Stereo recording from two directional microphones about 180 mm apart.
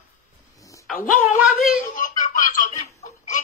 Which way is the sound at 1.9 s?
45° left (ahead or behind).